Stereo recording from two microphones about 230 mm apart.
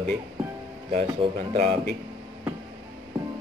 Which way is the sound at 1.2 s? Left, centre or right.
Right.